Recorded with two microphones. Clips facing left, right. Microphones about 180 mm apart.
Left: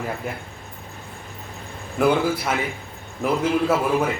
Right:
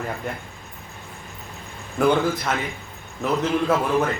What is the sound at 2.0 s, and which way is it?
A man's voice, 10° left (ahead or behind).